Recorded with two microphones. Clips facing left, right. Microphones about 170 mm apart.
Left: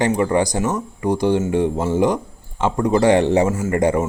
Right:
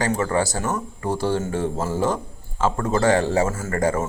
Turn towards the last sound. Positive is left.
turn(degrees=20)  # may be behind; listen again after turning